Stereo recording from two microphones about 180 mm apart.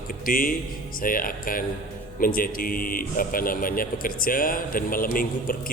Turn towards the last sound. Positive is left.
turn(degrees=50)  # may be behind; listen again after turning